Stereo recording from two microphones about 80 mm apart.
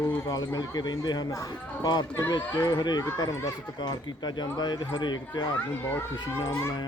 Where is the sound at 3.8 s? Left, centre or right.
Left.